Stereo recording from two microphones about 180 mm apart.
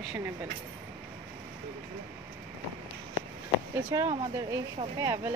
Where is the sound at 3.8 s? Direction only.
20° right (ahead or behind).